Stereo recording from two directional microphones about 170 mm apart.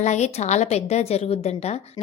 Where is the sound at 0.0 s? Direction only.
40° left (ahead or behind).